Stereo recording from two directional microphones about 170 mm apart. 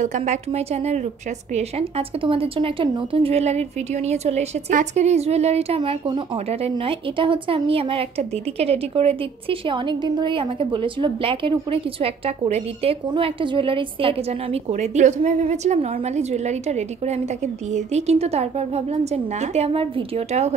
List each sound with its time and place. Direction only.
0.0 s speech: 45° right (ahead or behind)